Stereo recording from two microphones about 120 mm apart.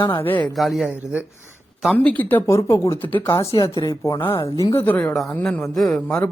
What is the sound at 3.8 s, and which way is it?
Speech, 30° left (ahead or behind).